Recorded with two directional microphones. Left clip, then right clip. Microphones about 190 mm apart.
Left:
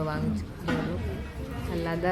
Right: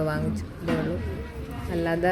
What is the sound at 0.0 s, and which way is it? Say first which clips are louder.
Speech: right 3 dB; 15° right (ahead or behind).